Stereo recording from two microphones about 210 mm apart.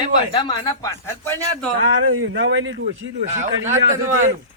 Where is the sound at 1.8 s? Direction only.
80° right.